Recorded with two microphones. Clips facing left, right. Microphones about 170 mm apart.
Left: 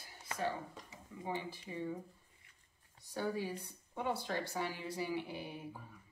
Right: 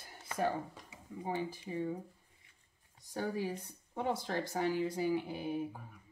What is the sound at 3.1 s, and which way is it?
Speech, 45° right (ahead or behind).